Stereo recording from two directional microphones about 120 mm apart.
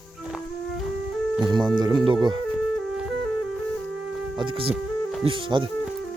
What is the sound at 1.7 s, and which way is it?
Speech, 40° right (ahead or behind).